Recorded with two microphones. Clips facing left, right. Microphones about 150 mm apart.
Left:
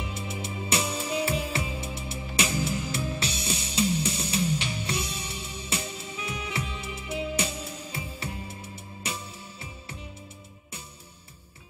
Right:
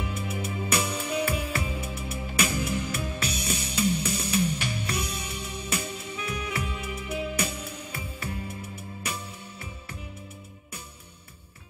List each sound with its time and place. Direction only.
0.1 s music: 30° left (ahead or behind)